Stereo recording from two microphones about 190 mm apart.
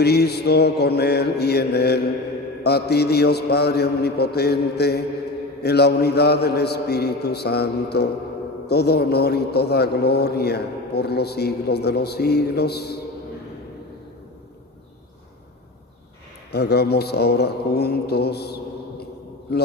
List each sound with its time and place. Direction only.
0.0 s a man's voice: 60° left (ahead or behind)
16.5 s a man's voice: 60° left (ahead or behind)